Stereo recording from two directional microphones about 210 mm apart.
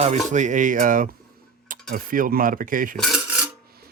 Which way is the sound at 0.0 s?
35° right (ahead or behind).